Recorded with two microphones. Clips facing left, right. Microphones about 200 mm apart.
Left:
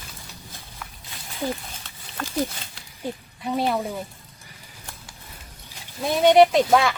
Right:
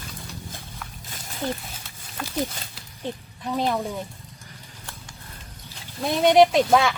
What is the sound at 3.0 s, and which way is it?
Speech, 10° left (ahead or behind).